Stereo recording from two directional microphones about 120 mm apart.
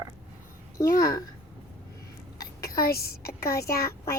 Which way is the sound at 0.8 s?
30° left (ahead or behind).